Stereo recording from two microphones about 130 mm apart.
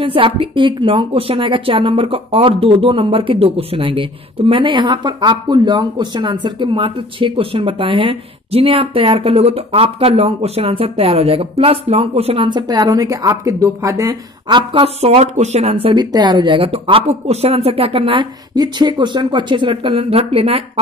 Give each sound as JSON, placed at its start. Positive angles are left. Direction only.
{"t": 0.0, "sound": "a woman's voice", "side_deg": -45}
{"t": 12.4, "sound": "a woman's voice", "side_deg": -35}
{"t": 14.5, "sound": "a woman's voice", "side_deg": -45}